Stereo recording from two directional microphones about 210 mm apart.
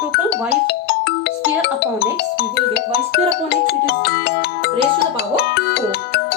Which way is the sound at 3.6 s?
55° left (ahead or behind).